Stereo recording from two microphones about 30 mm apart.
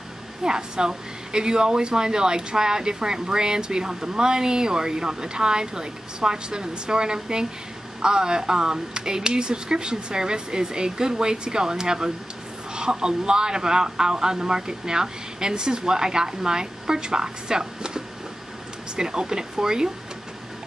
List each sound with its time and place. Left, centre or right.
0.4 s speech: right